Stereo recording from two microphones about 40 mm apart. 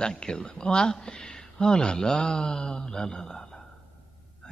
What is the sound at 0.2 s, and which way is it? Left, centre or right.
Speech, centre.